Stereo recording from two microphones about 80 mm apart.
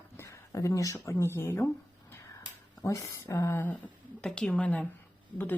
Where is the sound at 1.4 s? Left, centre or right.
Left.